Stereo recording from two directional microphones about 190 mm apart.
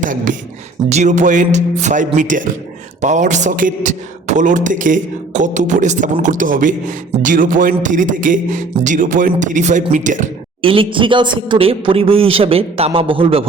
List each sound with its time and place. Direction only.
0.0 s speech: 45° right (ahead or behind)
10.6 s a man's voice: 30° right (ahead or behind)